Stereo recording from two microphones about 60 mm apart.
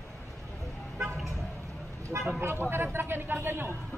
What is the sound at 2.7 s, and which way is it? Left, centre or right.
Speech, right.